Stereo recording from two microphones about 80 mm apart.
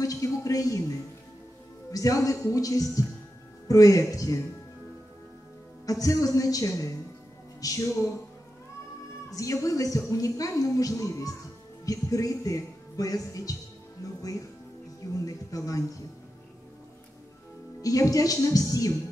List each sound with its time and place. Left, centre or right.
0.0 s a woman's voice: left
1.9 s a woman's voice: left
5.9 s a woman's voice: left
9.3 s a woman's voice: left
17.8 s a woman's voice: left